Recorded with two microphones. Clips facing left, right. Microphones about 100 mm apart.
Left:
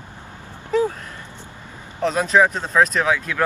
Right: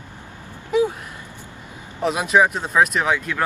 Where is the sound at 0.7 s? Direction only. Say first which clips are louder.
Right 1 dB; 10° right (ahead or behind).